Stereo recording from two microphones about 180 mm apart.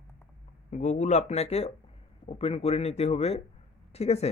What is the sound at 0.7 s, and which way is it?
Speech, 45° left (ahead or behind).